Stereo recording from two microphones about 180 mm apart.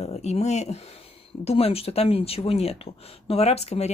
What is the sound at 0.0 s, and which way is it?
Speech, 35° left (ahead or behind).